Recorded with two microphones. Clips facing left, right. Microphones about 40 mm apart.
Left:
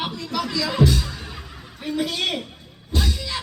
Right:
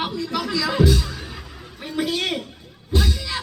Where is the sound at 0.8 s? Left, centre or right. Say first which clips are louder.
Even; centre.